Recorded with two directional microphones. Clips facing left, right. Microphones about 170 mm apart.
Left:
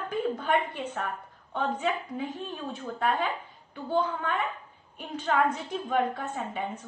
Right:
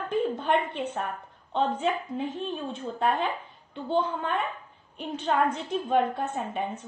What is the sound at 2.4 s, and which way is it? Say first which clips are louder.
A woman's voice: right 3 dB; 25° right (ahead or behind).